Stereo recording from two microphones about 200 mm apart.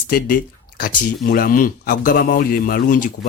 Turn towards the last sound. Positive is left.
turn(degrees=45)  # may be behind; listen again after turning